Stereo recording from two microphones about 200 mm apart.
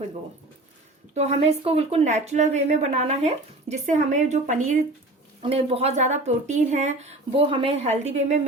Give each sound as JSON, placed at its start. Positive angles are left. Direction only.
{"t": 1.1, "sound": "speech", "side_deg": -35}